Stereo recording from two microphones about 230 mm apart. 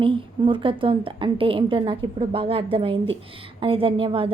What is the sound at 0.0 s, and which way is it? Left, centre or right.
A woman's voice, right.